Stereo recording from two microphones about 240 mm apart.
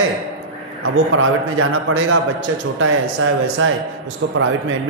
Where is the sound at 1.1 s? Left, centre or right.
Right.